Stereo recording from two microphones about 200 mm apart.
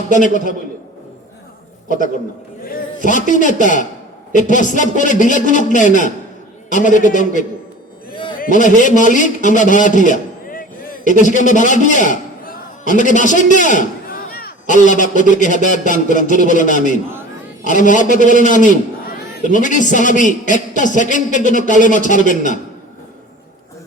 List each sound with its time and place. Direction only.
0.1 s a man's voice: 40° left (ahead or behind)
3.1 s a man's voice: 40° left (ahead or behind)
10.1 s a sound: 40° left (ahead or behind)
11.2 s a man's voice: 40° left (ahead or behind)